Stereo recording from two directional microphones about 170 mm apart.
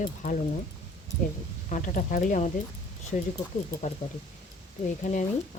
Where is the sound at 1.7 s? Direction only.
50° left (ahead or behind).